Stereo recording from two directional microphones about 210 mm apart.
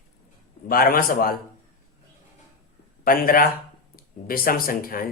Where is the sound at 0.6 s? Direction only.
45° left (ahead or behind).